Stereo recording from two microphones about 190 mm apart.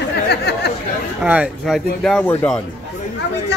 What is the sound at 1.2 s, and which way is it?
Speech, 5° right (ahead or behind).